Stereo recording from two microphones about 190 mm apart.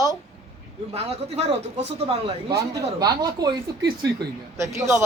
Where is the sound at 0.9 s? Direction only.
35° right (ahead or behind).